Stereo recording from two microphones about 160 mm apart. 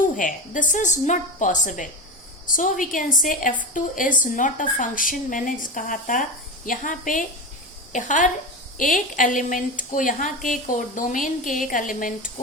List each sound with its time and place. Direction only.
0.0 s a woman's voice: 55° left (ahead or behind)